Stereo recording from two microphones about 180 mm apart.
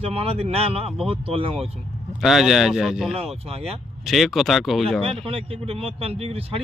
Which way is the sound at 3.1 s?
35° right (ahead or behind).